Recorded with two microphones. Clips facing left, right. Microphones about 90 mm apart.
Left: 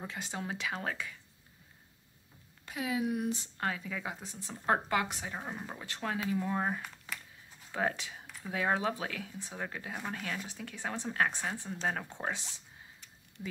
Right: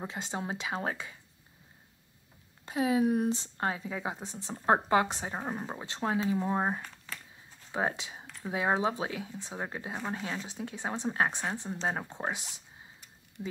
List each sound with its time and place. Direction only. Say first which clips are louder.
0.0 s speech: right 3 dB; 25° right (ahead or behind)
2.6 s speech: right 7 dB; 30° right (ahead or behind); by 12.6 s 15° right (ahead or behind)
13.4 s speech: right 3 dB; 30° right (ahead or behind)